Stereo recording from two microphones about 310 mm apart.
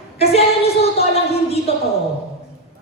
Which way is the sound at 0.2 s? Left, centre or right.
Centre.